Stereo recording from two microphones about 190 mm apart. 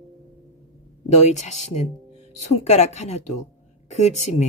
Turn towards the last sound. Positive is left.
turn(degrees=35)  # may be behind; listen again after turning